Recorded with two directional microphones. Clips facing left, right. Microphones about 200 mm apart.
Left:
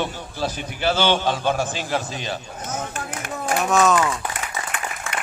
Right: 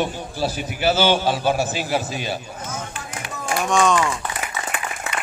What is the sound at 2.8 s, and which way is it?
Chop, 50° left (ahead or behind).